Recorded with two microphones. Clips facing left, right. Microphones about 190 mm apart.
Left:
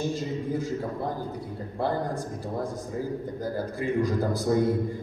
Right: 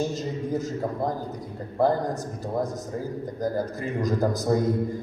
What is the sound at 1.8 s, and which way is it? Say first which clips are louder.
A man's voice: right 5 dB; 40° right (ahead or behind).